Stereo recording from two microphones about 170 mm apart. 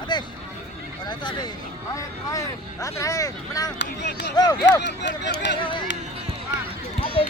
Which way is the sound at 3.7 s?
85° left.